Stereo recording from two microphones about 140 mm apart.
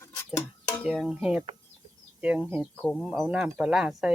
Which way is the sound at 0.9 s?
Centre (ahead or behind).